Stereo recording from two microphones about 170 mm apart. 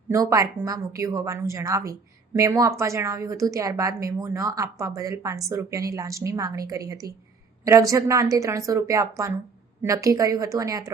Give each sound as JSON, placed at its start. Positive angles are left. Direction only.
{"t": 0.1, "sound": "a woman's voice", "side_deg": -20}